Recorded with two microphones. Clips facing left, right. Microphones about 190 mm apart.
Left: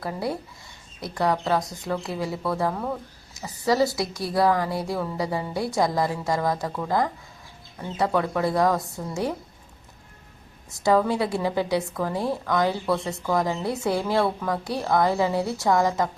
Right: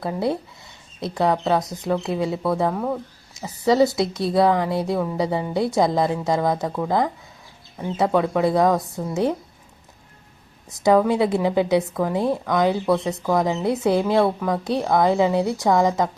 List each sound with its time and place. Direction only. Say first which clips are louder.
0.0 s speech: right 5 dB; 25° right (ahead or behind)
10.8 s speech: right 4 dB; 15° right (ahead or behind)